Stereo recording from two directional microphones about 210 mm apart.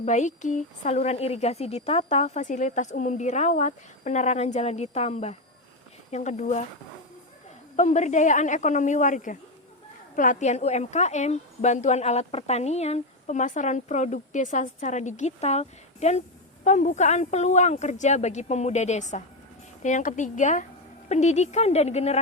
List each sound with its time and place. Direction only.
0.0 s a woman's voice: 35° left (ahead or behind)
7.8 s a woman's voice: 35° left (ahead or behind)